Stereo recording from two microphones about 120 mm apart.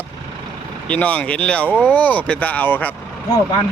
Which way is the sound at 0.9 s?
10° left (ahead or behind).